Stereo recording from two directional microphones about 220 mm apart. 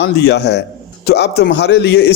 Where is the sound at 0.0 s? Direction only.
50° left (ahead or behind).